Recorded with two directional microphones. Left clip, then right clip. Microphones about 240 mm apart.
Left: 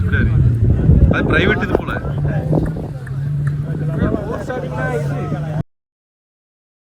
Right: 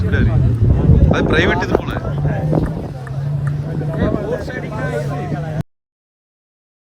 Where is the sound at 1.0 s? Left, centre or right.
Centre.